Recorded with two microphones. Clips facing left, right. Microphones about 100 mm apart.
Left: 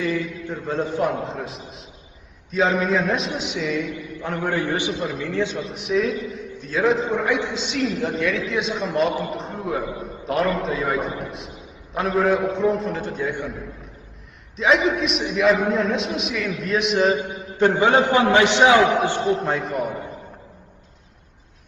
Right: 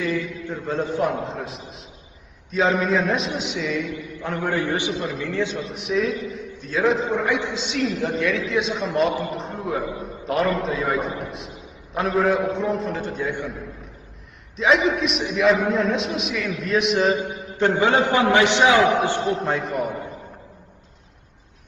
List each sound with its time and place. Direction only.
0.0 s a man's voice: 15° left (ahead or behind)
1.0 s a man's voice: centre (ahead or behind)
4.2 s a man's voice: 15° left (ahead or behind)
5.5 s a man's voice: centre (ahead or behind)
14.6 s a man's voice: centre (ahead or behind)
17.6 s a man's voice: 15° left (ahead or behind)
19.3 s a man's voice: centre (ahead or behind)